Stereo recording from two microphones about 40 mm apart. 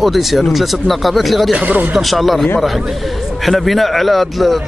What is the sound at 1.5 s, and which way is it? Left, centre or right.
Speech, right.